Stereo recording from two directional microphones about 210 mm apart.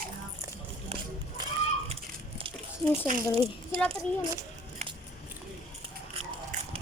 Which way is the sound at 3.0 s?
35° right (ahead or behind).